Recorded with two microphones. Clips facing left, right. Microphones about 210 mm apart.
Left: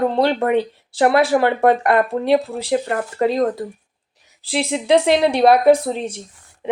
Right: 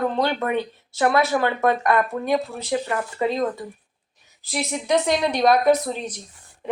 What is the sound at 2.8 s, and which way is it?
Speech, 50° left (ahead or behind).